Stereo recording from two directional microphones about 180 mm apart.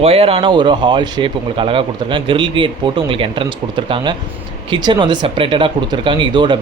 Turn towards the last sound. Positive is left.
turn(degrees=-25)  # may be behind; listen again after turning